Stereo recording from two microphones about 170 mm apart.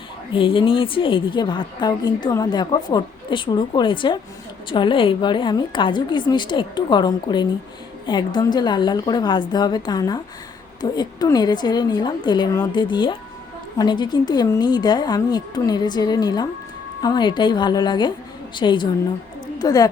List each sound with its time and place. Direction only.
0.3 s a woman's voice: 30° left (ahead or behind)